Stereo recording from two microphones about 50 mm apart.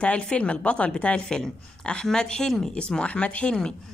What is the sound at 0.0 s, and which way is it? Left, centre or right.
A woman's voice, left.